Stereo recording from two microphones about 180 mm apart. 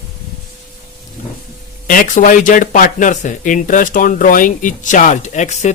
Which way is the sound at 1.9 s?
45° left (ahead or behind).